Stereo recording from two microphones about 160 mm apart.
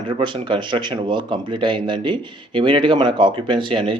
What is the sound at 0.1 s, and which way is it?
Speech, 30° right (ahead or behind).